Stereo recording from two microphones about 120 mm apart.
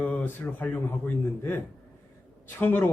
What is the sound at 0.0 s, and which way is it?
Speech, 10° left (ahead or behind).